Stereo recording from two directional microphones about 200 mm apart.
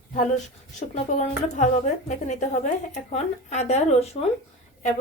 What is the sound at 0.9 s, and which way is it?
A woman's voice, 35° left (ahead or behind).